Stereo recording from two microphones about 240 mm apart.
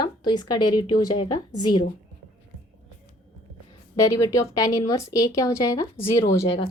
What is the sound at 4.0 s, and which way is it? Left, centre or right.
A woman's voice, centre.